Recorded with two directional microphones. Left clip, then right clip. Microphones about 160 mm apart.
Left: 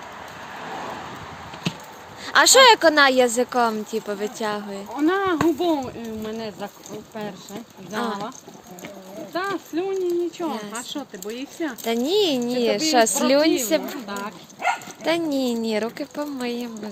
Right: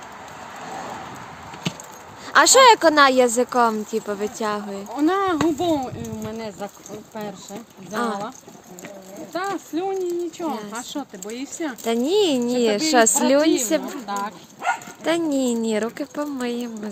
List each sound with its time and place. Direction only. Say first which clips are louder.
2.2 s speech: right 1 dB; 5° right (ahead or behind)
4.9 s speech: right 1 dB; 65° right (ahead or behind); by 6.7 s 85° right
7.9 s speech: right 2 dB; 20° right (ahead or behind)
9.3 s speech: even; 75° right (ahead or behind)
11.9 s speech: right 1 dB; 20° right (ahead or behind)
14.1 s speech: right 7 dB; 45° right (ahead or behind)
15.0 s speech: right 1 dB; 20° right (ahead or behind)